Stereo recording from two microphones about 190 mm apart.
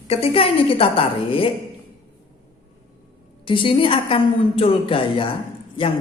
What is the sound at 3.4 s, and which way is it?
A man's voice, 25° left (ahead or behind).